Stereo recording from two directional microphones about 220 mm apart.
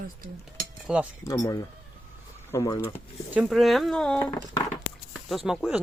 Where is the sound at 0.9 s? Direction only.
5° right (ahead or behind).